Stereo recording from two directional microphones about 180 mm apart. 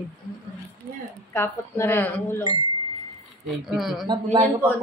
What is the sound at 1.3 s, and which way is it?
Speech, 10° left (ahead or behind).